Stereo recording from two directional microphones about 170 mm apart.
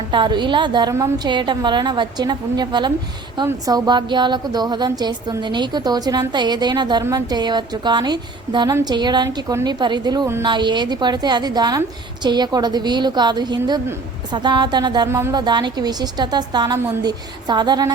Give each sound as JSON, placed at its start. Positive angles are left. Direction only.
{"t": 0.1, "sound": "a woman's voice", "side_deg": -25}